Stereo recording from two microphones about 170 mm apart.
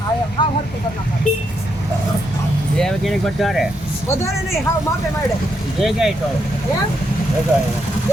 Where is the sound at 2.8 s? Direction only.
5° left (ahead or behind).